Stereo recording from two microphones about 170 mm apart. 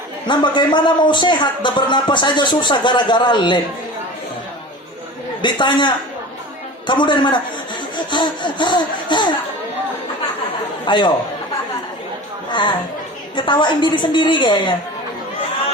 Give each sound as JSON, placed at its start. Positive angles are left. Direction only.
{"t": 0.3, "sound": "a man's voice", "side_deg": 25}
{"t": 5.4, "sound": "a man's voice", "side_deg": 25}
{"t": 10.8, "sound": "a man's voice", "side_deg": 25}
{"t": 12.5, "sound": "a man's voice", "side_deg": 25}